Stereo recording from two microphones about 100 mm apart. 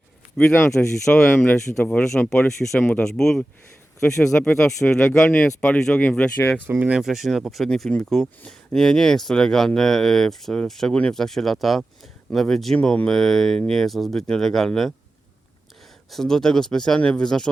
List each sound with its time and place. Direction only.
0.5 s speech: 25° left (ahead or behind)
0.8 s speech: 5° left (ahead or behind)
6.7 s speech: 15° right (ahead or behind)
7.0 s speech: 5° right (ahead or behind)
16.0 s speech: 5° left (ahead or behind)